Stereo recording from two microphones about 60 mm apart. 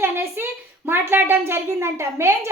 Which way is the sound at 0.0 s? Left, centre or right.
Right.